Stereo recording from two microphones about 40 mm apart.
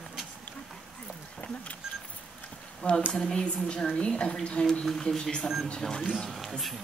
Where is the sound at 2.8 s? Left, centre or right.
Left.